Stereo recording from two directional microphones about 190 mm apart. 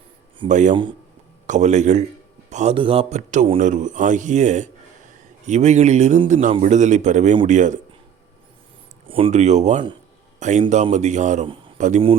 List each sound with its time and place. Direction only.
0.4 s speech: 40° right (ahead or behind)
9.0 s speech: 30° right (ahead or behind)